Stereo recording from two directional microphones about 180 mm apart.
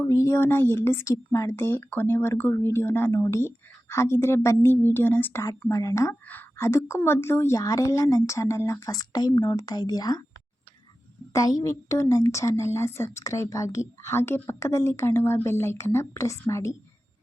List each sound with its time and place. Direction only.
0.0 s speech: 15° left (ahead or behind)
11.3 s speech: 20° left (ahead or behind)